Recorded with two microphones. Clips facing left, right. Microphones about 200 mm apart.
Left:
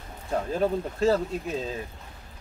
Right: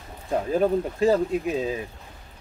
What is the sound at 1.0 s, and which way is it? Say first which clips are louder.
Speech: right 2 dB; 15° right (ahead or behind).